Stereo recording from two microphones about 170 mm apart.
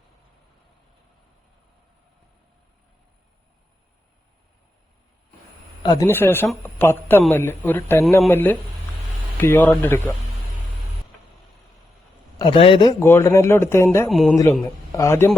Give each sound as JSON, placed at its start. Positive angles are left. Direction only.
{"t": 5.8, "sound": "a man's voice", "side_deg": 25}
{"t": 6.1, "sound": "speech", "side_deg": 10}
{"t": 12.4, "sound": "a man's voice", "side_deg": 30}
{"t": 13.0, "sound": "speech", "side_deg": 15}
{"t": 14.1, "sound": "speech", "side_deg": 0}
{"t": 14.9, "sound": "speech", "side_deg": 15}